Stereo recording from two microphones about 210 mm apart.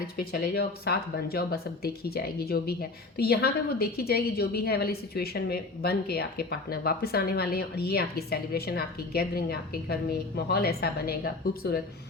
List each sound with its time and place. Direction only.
0.2 s a woman's voice: 50° left (ahead or behind)